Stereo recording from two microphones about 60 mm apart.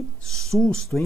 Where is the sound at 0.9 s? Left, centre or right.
Centre.